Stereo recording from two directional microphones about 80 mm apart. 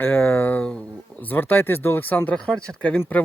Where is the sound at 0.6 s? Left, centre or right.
Centre.